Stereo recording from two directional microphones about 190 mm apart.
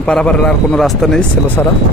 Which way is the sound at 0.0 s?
5° left (ahead or behind).